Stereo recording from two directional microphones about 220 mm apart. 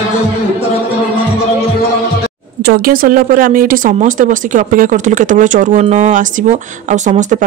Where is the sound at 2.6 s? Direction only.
45° right (ahead or behind).